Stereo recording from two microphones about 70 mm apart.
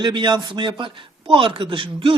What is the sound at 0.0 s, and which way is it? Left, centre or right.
Speech, right.